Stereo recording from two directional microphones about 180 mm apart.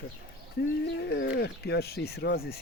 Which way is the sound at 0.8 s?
65° left (ahead or behind).